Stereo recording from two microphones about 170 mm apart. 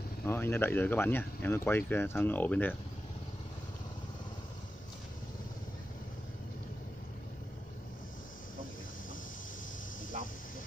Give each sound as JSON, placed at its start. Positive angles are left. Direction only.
{"t": 0.2, "sound": "speech", "side_deg": 15}